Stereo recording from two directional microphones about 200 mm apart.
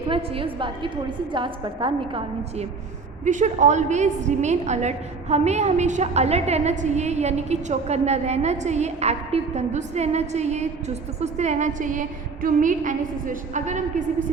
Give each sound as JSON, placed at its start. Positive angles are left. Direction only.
{"t": 0.1, "sound": "a woman's voice", "side_deg": -25}
{"t": 3.2, "sound": "a woman's voice", "side_deg": -40}